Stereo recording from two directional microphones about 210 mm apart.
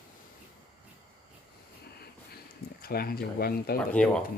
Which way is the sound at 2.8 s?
45° left (ahead or behind).